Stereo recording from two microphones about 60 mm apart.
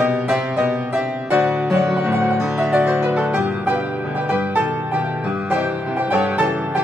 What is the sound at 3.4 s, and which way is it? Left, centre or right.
Music, right.